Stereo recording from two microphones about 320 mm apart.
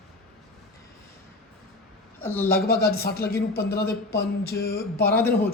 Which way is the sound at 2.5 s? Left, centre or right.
Left.